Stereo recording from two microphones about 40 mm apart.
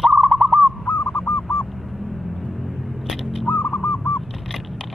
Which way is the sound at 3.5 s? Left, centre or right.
Left.